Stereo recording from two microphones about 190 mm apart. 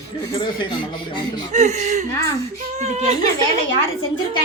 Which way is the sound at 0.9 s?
25° left (ahead or behind).